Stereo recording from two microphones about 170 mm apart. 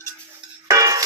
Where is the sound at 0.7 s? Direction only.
20° right (ahead or behind).